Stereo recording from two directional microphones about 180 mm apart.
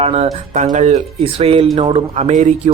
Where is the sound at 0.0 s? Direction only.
35° right (ahead or behind).